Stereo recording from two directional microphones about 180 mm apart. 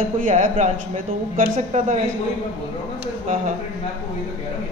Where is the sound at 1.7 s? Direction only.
40° right (ahead or behind).